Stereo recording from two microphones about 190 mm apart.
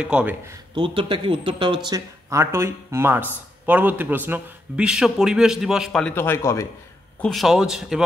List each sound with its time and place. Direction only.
0.0 s speech: 5° right (ahead or behind)
0.7 s a man's voice: 25° right (ahead or behind); by 6.7 s 15° left (ahead or behind)
7.2 s a man's voice: centre (ahead or behind)